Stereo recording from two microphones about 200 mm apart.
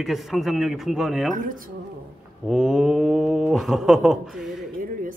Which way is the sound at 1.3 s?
40° right (ahead or behind).